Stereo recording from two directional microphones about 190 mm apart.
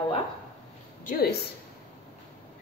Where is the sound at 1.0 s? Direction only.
55° left (ahead or behind).